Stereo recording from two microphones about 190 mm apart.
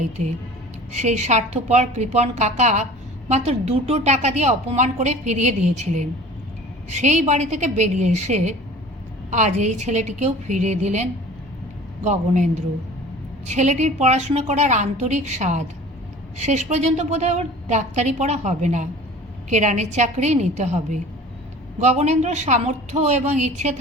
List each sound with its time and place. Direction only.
0.9 s a woman's voice: 35° right (ahead or behind)
13.5 s a woman's voice: 40° right (ahead or behind)